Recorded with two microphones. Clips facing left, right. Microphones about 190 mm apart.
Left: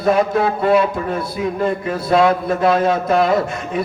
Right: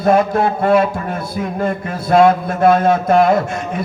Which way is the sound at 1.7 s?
50° right (ahead or behind).